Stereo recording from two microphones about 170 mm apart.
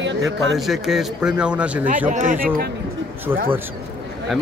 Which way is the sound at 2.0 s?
50° right (ahead or behind).